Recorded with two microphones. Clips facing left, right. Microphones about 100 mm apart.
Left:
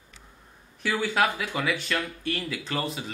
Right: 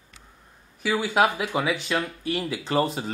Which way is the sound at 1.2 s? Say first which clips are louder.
Right 3 dB; 20° right (ahead or behind).